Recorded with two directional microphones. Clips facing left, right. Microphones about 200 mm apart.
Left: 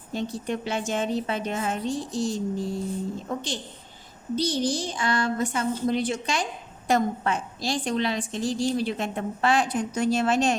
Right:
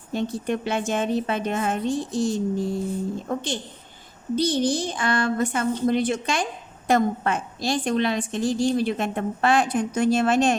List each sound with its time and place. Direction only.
0.1 s a woman's voice: 55° right (ahead or behind)